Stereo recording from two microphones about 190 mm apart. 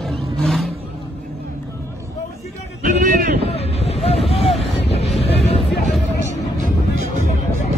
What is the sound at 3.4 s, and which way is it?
Vehicle, 30° left (ahead or behind).